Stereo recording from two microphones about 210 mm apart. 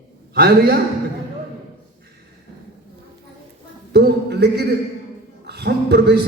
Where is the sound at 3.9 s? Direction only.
50° right (ahead or behind).